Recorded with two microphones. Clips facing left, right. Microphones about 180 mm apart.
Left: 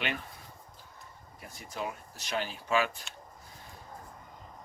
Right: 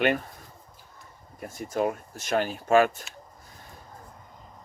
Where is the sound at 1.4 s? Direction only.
50° right (ahead or behind).